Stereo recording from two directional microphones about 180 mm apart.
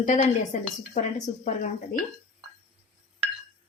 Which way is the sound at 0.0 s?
45° left (ahead or behind).